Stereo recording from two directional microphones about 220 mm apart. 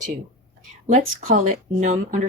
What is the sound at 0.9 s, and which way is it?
Speech, 35° right (ahead or behind).